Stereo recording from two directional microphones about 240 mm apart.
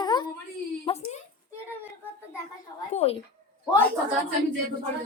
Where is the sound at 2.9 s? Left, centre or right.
Left.